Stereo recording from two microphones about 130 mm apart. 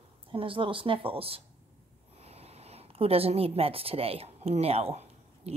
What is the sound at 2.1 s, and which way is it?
A woman's voice, 50° right (ahead or behind).